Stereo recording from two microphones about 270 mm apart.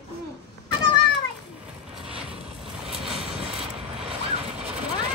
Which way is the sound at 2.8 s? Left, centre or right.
Right.